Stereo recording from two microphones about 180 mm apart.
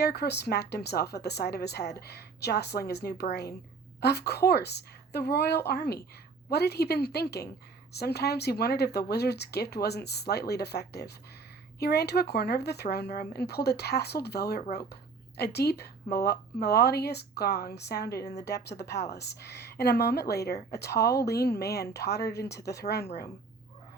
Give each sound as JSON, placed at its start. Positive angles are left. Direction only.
{"t": 0.0, "sound": "speech", "side_deg": 65}